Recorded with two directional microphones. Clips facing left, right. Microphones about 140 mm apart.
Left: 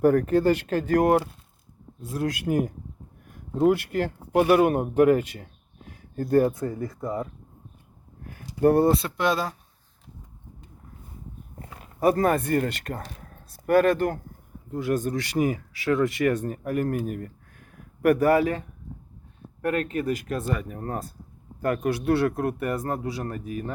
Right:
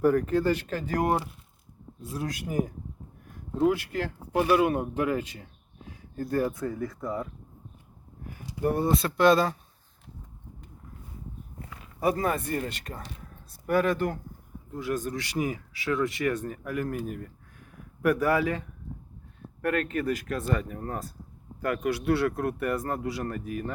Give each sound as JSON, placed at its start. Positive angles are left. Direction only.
{"t": 0.0, "sound": "speech", "side_deg": 50}
{"t": 4.3, "sound": "speech", "side_deg": 20}
{"t": 4.6, "sound": "speech", "side_deg": 50}
{"t": 6.3, "sound": "speech", "side_deg": 30}
{"t": 8.6, "sound": "speech", "side_deg": 70}
{"t": 8.9, "sound": "speech", "side_deg": 25}
{"t": 11.8, "sound": "speech", "side_deg": 50}
{"t": 14.7, "sound": "speech", "side_deg": 55}
{"t": 16.0, "sound": "speech", "side_deg": 50}
{"t": 19.6, "sound": "speech", "side_deg": 25}
{"t": 21.6, "sound": "speech", "side_deg": 45}
{"t": 22.5, "sound": "speech", "side_deg": 25}